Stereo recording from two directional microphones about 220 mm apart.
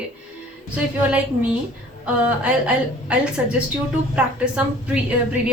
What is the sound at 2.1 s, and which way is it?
A woman's voice, 5° right (ahead or behind).